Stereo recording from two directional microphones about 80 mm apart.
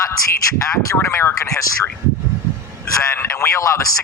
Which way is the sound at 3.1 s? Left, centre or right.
Left.